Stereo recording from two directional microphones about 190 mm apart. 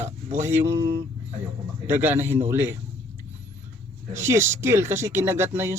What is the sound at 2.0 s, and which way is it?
Speech, 10° right (ahead or behind).